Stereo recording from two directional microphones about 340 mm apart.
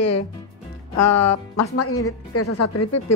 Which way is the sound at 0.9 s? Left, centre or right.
Left.